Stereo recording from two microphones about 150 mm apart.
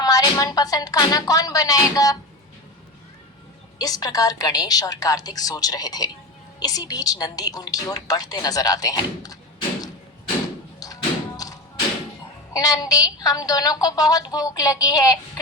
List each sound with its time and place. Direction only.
0.0 s a woman's voice: 25° left (ahead or behind)
3.8 s a woman's voice: 25° left (ahead or behind)
10.8 s thump: 25° left (ahead or behind)
12.5 s a woman's voice: 25° left (ahead or behind)